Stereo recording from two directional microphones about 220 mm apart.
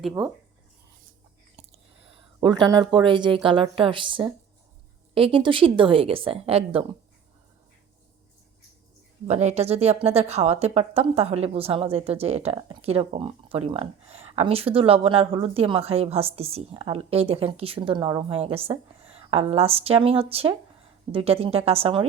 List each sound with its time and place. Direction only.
2.4 s speech: 20° right (ahead or behind)
9.2 s speech: 30° right (ahead or behind)